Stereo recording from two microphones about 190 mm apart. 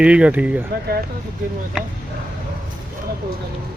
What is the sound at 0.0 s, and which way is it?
Speech, 5° right (ahead or behind).